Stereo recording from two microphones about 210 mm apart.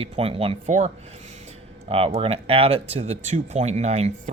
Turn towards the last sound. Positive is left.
turn(degrees=-30)  # may be behind; listen again after turning